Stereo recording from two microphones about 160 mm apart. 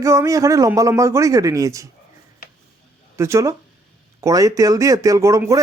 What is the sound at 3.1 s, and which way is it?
Speech, 15° right (ahead or behind).